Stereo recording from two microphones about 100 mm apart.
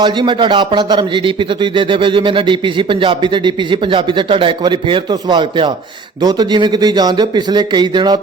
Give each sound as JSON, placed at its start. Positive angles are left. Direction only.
{"t": 0.0, "sound": "a man's voice", "side_deg": -50}